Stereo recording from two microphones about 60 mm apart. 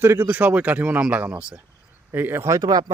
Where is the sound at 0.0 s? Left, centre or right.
Right.